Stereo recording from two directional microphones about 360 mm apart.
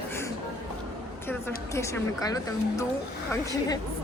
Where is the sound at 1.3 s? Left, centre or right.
Centre.